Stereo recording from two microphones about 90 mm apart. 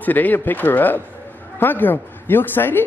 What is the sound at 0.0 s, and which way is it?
Speech, 20° left (ahead or behind).